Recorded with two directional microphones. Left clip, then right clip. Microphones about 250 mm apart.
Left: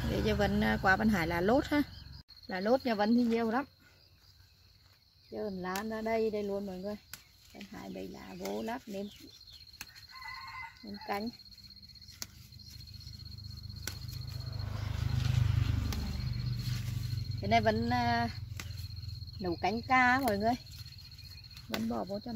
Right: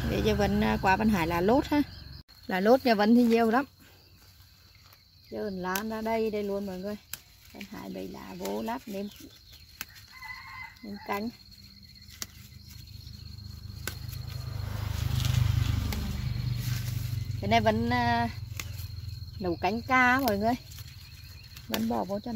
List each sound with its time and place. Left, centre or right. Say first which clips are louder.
0.1 s speech: right 4 dB; centre
2.4 s speech: right 7 dB; right
5.3 s speech: right 5 dB; centre
10.8 s speech: right 4 dB; centre
13.9 s a sound: right 4 dB; centre
14.7 s vehicle: right 6 dB; right
17.4 s speech: right 4 dB; centre
21.6 s speech: right 6 dB; centre